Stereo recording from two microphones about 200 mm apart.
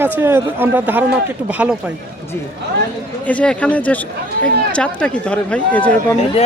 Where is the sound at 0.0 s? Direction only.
10° right (ahead or behind).